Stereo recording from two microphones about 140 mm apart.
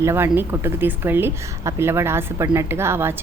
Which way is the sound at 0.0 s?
20° right (ahead or behind).